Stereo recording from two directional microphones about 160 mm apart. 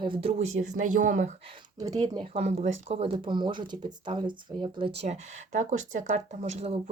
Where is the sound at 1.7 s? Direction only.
20° right (ahead or behind).